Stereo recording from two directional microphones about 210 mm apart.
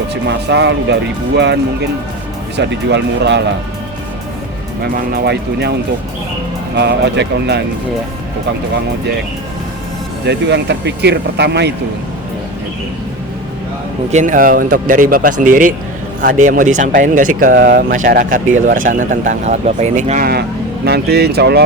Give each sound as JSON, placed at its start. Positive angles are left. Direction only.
{"t": 0.1, "sound": "speech", "side_deg": -55}
{"t": 2.6, "sound": "speech", "side_deg": -55}
{"t": 4.9, "sound": "speech", "side_deg": -45}
{"t": 6.7, "sound": "speech", "side_deg": -55}
{"t": 10.2, "sound": "speech", "side_deg": -55}
{"t": 14.1, "sound": "speech", "side_deg": -35}